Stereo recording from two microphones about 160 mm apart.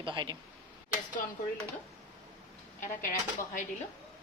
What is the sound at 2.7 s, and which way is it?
Speech, 55° left (ahead or behind).